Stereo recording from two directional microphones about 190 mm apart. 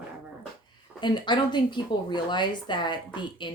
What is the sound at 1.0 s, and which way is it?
A woman's voice, 25° left (ahead or behind).